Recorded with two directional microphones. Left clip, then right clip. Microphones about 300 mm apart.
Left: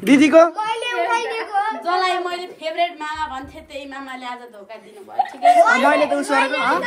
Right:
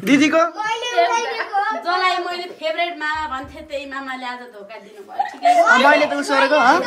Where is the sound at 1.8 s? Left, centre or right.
Centre.